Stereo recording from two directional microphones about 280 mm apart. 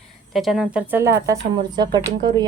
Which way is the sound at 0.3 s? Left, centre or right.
Centre.